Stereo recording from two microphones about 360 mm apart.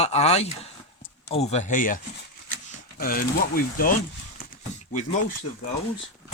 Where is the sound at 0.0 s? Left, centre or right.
Centre.